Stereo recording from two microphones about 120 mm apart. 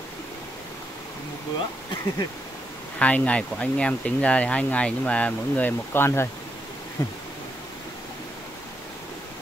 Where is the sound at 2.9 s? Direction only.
10° left (ahead or behind).